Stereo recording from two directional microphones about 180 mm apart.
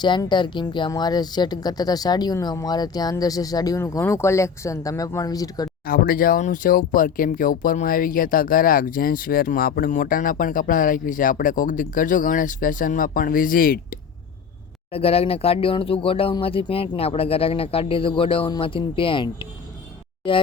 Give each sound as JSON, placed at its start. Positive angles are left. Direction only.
{"t": 0.0, "sound": "speech", "side_deg": 25}
{"t": 5.8, "sound": "speech", "side_deg": 55}
{"t": 14.9, "sound": "speech", "side_deg": 35}